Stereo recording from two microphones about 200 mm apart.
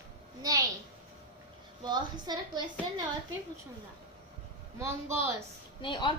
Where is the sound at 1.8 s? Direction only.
20° right (ahead or behind).